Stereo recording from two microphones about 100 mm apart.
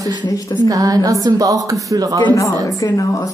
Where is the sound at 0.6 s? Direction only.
40° right (ahead or behind).